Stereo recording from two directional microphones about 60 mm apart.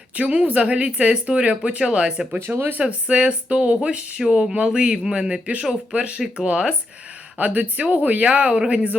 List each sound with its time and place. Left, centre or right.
0.2 s speech: right
7.3 s speech: right